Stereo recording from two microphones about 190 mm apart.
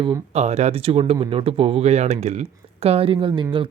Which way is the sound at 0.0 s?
30° right (ahead or behind).